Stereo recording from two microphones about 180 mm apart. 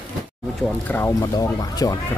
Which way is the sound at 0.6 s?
10° left (ahead or behind).